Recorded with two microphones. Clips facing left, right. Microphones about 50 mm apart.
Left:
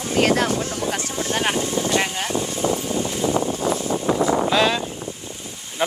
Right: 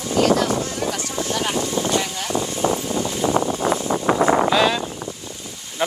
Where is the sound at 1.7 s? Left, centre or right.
Right.